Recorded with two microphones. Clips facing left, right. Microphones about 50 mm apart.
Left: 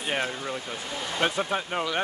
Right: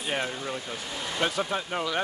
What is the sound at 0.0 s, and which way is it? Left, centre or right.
Speech, centre.